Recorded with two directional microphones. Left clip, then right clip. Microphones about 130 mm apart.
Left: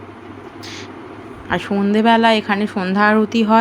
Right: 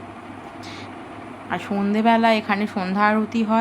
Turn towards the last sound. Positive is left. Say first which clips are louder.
# left 7 dB
turn(degrees=45)  # may be behind; listen again after turning